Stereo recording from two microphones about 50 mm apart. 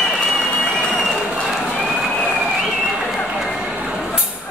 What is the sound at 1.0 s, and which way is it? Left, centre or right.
Applause, centre.